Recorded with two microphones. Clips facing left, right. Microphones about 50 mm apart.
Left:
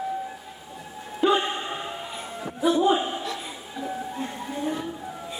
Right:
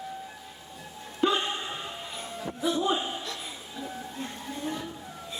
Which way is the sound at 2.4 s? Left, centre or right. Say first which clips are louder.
Left 6 dB; centre.